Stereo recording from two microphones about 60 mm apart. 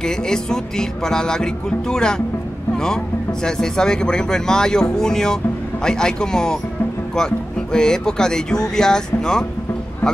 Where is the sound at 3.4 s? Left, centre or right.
Centre.